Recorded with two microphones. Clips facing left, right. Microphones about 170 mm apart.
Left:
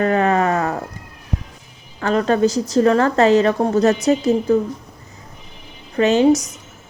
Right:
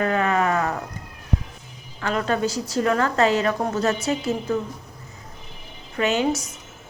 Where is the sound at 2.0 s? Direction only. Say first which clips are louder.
Left 7 dB; 40° left (ahead or behind).